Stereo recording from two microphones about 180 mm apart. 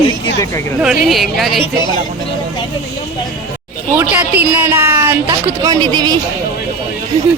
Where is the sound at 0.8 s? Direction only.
Centre (ahead or behind).